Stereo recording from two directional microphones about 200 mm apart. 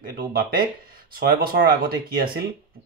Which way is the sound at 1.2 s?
45° right (ahead or behind).